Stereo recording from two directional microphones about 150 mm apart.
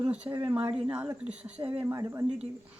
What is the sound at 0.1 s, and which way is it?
Speech, 10° right (ahead or behind).